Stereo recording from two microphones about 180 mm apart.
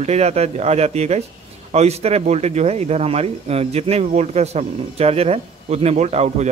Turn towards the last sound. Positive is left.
turn(degrees=-40)  # may be behind; listen again after turning